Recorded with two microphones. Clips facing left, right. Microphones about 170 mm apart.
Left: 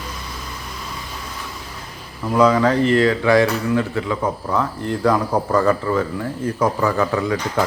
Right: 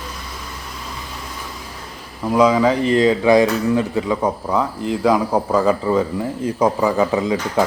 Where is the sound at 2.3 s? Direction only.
10° right (ahead or behind).